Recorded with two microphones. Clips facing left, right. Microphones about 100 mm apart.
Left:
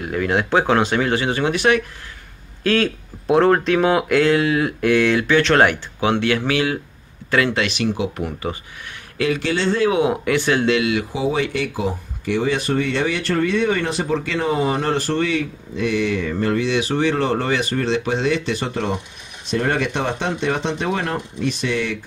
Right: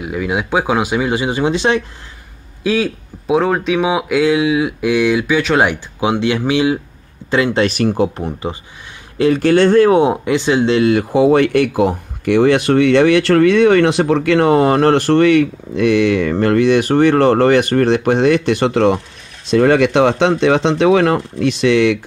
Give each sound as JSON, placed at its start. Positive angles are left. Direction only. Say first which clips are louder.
{"t": 0.0, "sound": "speech", "louder": "right 1 dB", "side_deg": -5}
{"t": 2.6, "sound": "speech", "louder": "right 2 dB", "side_deg": -10}
{"t": 7.6, "sound": "speech", "louder": "right 7 dB", "side_deg": -45}
{"t": 8.2, "sound": "speech", "louder": "right 3 dB", "side_deg": -25}
{"t": 9.4, "sound": "speech", "louder": "right 11 dB", "side_deg": -55}
{"t": 9.9, "sound": "speech", "louder": "right 5 dB", "side_deg": -25}
{"t": 10.7, "sound": "speech", "louder": "right 6 dB", "side_deg": -40}
{"t": 11.1, "sound": "speech", "louder": "right 10 dB", "side_deg": -60}